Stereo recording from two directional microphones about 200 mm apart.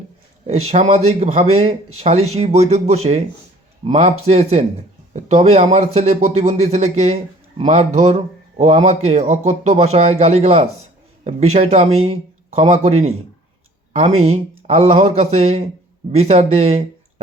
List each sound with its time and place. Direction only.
0.4 s speech: 30° right (ahead or behind)
13.9 s speech: 35° right (ahead or behind)